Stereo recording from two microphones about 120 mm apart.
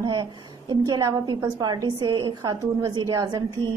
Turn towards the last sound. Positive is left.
turn(degrees=-30)  # may be behind; listen again after turning